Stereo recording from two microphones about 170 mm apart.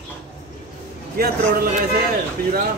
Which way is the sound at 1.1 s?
60° right (ahead or behind).